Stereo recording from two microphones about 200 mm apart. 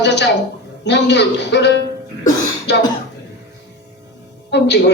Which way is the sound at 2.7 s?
60° left (ahead or behind).